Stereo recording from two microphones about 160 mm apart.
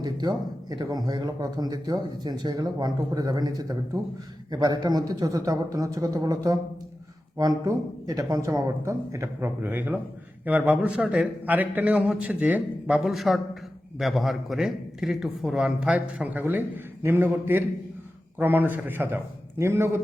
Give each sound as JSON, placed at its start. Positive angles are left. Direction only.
{"t": 0.0, "sound": "a man's voice", "side_deg": -25}